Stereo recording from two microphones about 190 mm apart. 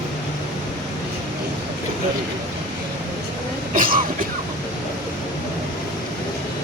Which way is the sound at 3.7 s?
45° right (ahead or behind).